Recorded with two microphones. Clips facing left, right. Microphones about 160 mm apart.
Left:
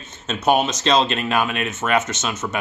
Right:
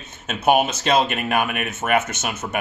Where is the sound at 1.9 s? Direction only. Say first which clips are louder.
Right 1 dB; 55° right (ahead or behind).